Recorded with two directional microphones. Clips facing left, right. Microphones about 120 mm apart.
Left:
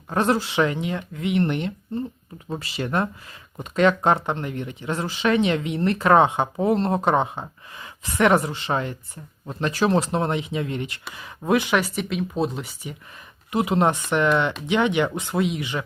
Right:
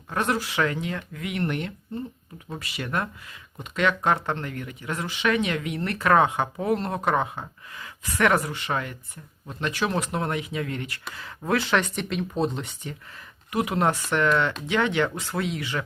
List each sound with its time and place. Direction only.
0.1 s speech: 30° left (ahead or behind)
4.3 s speech: 20° left (ahead or behind)
13.5 s speech: 25° left (ahead or behind)